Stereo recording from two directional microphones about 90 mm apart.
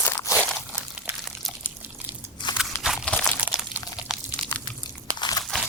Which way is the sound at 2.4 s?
60° left (ahead or behind).